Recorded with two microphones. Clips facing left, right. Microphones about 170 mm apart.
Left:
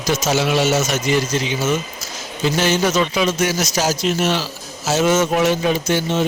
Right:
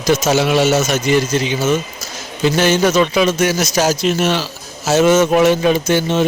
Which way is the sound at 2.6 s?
60° right (ahead or behind).